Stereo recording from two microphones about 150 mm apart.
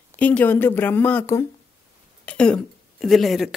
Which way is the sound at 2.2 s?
5° left (ahead or behind).